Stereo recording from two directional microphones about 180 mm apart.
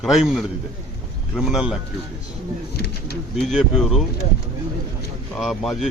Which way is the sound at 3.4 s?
Centre (ahead or behind).